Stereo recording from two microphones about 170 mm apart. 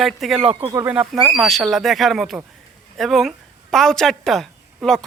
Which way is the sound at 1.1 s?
5° right (ahead or behind).